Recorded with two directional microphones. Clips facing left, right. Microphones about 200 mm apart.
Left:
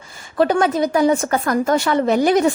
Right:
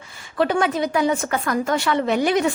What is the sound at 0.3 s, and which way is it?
A woman's voice, 40° left (ahead or behind).